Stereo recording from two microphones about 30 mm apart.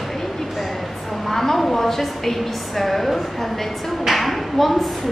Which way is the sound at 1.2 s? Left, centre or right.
Centre.